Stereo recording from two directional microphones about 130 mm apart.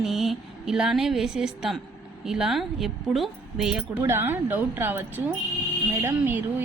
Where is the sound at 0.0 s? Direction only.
Centre (ahead or behind).